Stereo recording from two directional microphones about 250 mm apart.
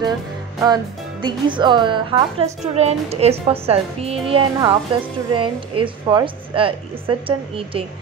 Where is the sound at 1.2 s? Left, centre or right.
Centre.